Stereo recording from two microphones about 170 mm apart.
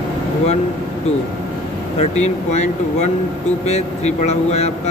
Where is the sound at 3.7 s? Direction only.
40° left (ahead or behind).